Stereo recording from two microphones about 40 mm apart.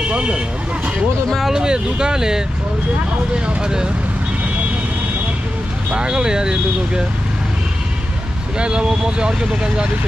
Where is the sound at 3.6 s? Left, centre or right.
Centre.